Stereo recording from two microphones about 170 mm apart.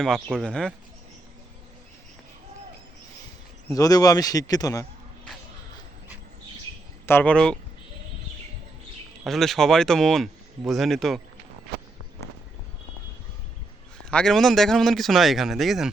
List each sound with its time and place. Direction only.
0.0 s a man's voice: 5° left (ahead or behind)
3.7 s a man's voice: 20° left (ahead or behind)
7.0 s speech: 10° left (ahead or behind)
9.2 s a man's voice: centre (ahead or behind)
14.1 s a man's voice: 5° left (ahead or behind)